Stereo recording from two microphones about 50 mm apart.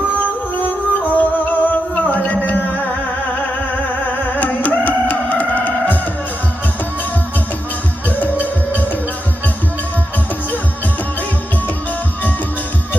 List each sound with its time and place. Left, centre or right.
0.5 s music: left
4.4 s music: left
8.1 s music: left